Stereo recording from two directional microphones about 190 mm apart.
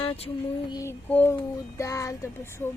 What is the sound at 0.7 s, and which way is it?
Child singing, 15° left (ahead or behind).